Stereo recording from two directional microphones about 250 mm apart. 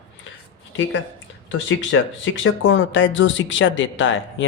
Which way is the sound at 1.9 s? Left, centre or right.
Left.